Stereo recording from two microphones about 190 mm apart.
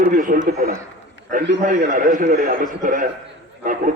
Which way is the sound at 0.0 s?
45° right (ahead or behind).